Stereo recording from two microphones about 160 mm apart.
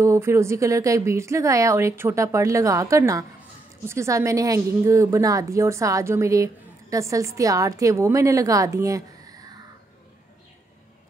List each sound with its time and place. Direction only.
0.0 s a woman's voice: 20° right (ahead or behind)